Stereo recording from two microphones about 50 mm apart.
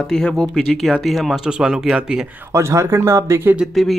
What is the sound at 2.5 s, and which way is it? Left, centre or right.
Speech, right.